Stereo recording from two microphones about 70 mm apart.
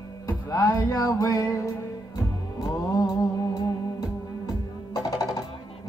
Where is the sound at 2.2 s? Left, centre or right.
Left.